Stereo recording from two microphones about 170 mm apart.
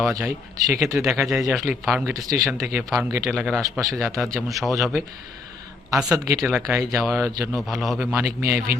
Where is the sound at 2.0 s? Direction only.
20° right (ahead or behind).